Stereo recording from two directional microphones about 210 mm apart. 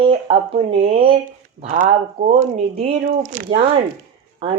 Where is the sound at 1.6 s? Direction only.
40° right (ahead or behind).